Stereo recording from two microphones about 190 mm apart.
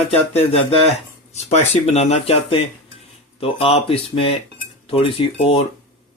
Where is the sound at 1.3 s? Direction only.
35° left (ahead or behind).